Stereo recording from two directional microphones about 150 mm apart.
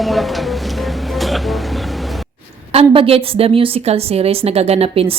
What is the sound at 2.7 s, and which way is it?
A woman's voice, 40° right (ahead or behind).